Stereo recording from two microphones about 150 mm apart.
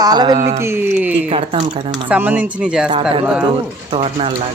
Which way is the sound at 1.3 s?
40° right (ahead or behind).